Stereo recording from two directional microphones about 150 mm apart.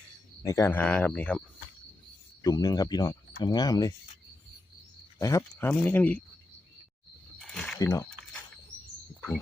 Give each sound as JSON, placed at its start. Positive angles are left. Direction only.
{"t": 0.4, "sound": "speech", "side_deg": 20}
{"t": 2.4, "sound": "speech", "side_deg": 25}
{"t": 5.2, "sound": "speech", "side_deg": 20}
{"t": 7.3, "sound": "a sound", "side_deg": 5}
{"t": 7.8, "sound": "speech", "side_deg": 20}